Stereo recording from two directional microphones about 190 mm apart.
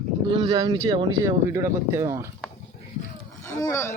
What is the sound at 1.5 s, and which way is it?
Speech, 15° right (ahead or behind).